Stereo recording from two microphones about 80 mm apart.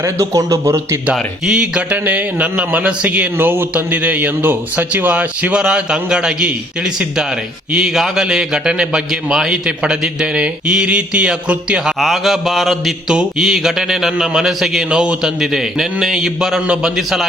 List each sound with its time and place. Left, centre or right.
0.0 s speech: right
1.1 s a man's voice: centre
7.7 s a man's voice: centre
11.9 s a sound: centre